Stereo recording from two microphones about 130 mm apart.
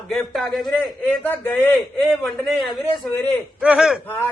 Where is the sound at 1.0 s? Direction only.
15° left (ahead or behind).